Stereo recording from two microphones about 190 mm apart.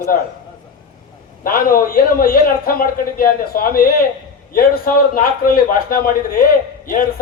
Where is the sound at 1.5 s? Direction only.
50° left (ahead or behind).